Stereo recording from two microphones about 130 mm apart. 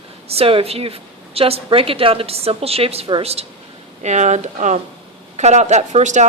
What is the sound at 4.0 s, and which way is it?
Speech, 65° right (ahead or behind).